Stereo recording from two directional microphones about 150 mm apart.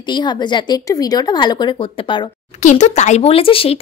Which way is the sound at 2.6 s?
50° left (ahead or behind).